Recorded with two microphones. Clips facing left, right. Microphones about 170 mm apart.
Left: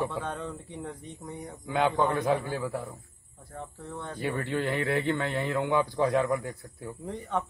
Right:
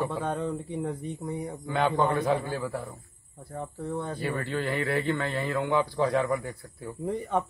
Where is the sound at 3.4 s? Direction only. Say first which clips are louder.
Right 6 dB; 10° right (ahead or behind).